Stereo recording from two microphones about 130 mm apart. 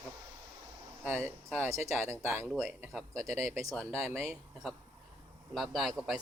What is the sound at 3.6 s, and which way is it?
A man's voice, 5° left (ahead or behind).